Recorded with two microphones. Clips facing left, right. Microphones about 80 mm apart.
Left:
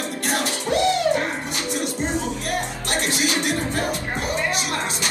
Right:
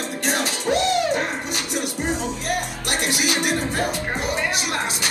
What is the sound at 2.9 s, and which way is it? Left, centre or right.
Music, centre.